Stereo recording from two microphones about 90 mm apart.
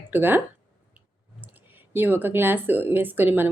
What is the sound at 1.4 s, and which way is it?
Speech, 20° right (ahead or behind).